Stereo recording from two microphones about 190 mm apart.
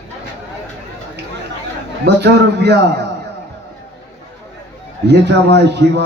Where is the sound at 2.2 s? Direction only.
60° right (ahead or behind).